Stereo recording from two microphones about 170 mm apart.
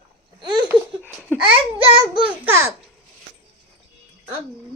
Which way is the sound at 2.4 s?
15° right (ahead or behind).